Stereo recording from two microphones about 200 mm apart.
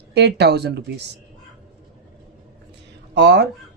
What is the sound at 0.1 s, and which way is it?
Speech, 60° right (ahead or behind).